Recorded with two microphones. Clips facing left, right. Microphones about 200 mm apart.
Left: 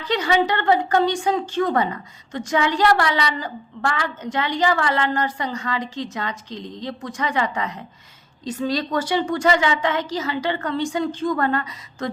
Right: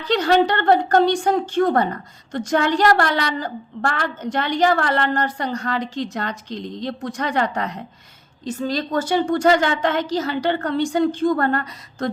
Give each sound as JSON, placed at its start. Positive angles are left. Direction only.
{"t": 0.1, "sound": "a woman's voice", "side_deg": -65}
{"t": 8.4, "sound": "a woman's voice", "side_deg": -50}